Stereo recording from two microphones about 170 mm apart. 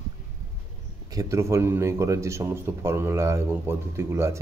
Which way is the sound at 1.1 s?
15° right (ahead or behind).